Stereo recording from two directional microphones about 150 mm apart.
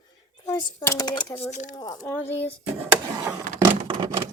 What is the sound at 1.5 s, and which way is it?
Speech, 55° left (ahead or behind).